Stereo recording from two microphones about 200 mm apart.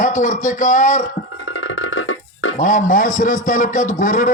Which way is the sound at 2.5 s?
40° left (ahead or behind).